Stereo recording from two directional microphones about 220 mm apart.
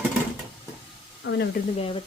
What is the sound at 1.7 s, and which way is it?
Speech, 25° left (ahead or behind).